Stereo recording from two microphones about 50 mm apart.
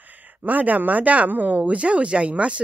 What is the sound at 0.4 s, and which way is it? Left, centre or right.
Speech, right.